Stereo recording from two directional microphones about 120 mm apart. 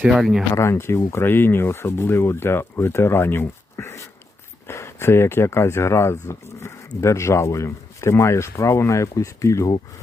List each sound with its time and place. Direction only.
0.0 s speech: 5° right (ahead or behind)
0.5 s speech: 25° left (ahead or behind)